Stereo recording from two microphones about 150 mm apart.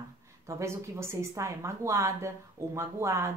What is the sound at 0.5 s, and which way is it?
Speech, 20° right (ahead or behind).